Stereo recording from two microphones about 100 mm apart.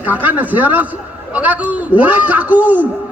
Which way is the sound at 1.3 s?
15° right (ahead or behind).